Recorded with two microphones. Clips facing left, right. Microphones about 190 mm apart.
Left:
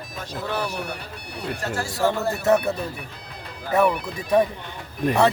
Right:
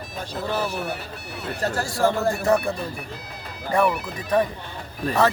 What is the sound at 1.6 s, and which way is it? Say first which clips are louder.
Speech: right 5 dB; 40° right (ahead or behind).